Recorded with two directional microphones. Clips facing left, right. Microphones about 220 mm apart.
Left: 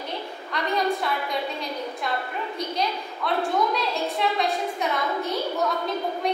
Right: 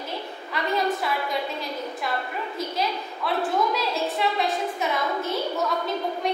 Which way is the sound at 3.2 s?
5° right (ahead or behind).